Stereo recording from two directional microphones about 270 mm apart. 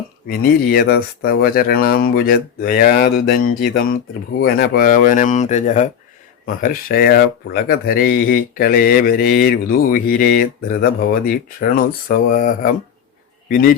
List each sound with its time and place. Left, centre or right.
0.3 s speech: left